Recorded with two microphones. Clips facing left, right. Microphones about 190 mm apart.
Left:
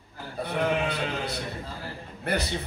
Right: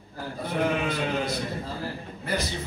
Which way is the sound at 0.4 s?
65° left (ahead or behind).